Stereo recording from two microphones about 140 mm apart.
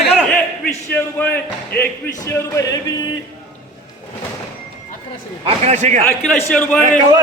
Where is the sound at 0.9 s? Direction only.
15° left (ahead or behind).